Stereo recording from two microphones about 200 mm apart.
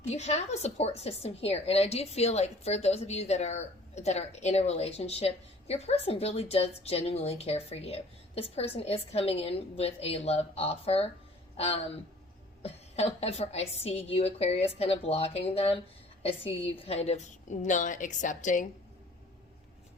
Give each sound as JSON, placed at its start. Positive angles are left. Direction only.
{"t": 0.0, "sound": "a woman's voice", "side_deg": 35}